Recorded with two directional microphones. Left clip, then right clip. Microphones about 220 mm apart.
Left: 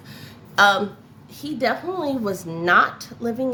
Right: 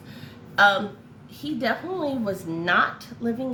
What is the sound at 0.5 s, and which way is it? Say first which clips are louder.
A woman's voice: left 2 dB; 50° left (ahead or behind).